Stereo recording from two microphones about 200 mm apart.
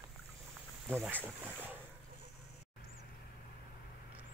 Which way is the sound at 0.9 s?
10° right (ahead or behind).